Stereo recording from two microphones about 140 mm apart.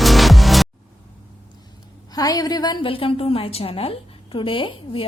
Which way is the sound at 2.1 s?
25° left (ahead or behind).